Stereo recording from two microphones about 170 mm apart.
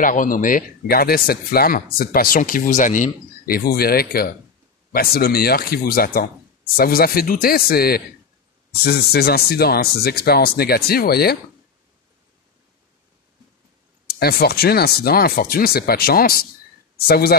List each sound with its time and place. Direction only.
0.0 s speech: 50° left (ahead or behind)
14.0 s speech: 65° left (ahead or behind)